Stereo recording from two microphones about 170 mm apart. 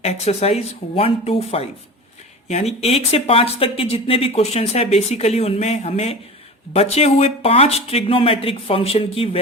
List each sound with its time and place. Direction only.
0.0 s speech: 40° left (ahead or behind)
2.8 s speech: 35° left (ahead or behind)